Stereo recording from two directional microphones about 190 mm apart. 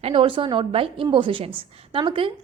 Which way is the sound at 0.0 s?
25° right (ahead or behind).